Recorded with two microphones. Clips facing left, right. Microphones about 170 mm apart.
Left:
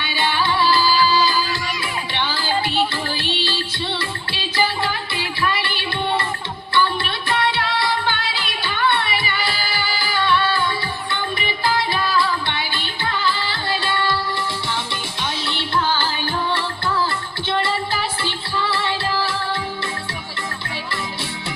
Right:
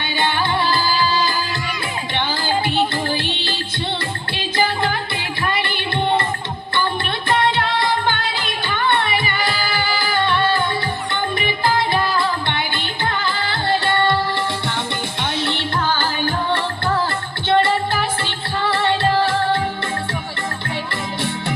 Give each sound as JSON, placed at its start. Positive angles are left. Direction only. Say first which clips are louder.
{"t": 0.2, "sound": "music", "louder": "even", "side_deg": -50}
{"t": 4.5, "sound": "music", "louder": "right 2 dB", "side_deg": -50}
{"t": 7.3, "sound": "music", "louder": "right 3 dB", "side_deg": -50}
{"t": 15.2, "sound": "music", "louder": "right 4 dB", "side_deg": -55}